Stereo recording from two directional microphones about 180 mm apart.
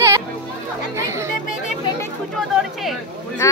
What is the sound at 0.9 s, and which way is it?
Chatter, 15° right (ahead or behind).